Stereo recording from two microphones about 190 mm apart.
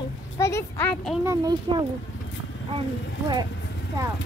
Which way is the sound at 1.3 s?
20° right (ahead or behind).